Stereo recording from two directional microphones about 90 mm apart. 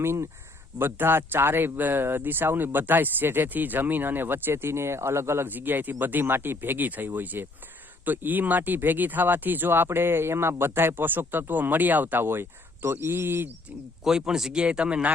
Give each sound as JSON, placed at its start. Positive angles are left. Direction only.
{"t": 0.0, "sound": "speech", "side_deg": -30}
{"t": 14.0, "sound": "speech", "side_deg": -5}